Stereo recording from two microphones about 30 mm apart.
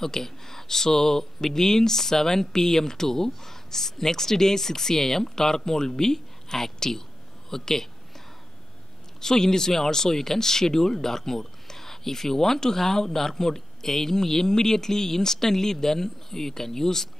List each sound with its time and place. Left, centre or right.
0.0 s speech: centre
9.2 s speech: centre